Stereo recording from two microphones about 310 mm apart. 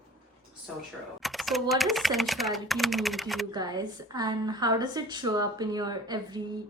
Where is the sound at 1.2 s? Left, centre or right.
Centre.